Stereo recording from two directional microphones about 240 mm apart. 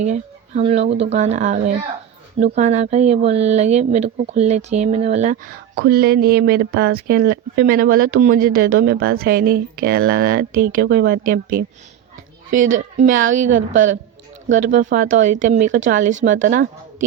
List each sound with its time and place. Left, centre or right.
0.0 s speech: right